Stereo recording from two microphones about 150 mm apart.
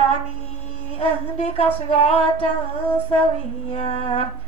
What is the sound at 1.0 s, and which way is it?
Carnatic music, 45° left (ahead or behind).